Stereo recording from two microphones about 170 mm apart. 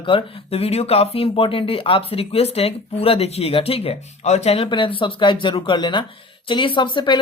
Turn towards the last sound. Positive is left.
turn(degrees=30)  # may be behind; listen again after turning